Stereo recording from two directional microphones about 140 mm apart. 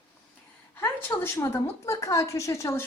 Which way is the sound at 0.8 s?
15° left (ahead or behind).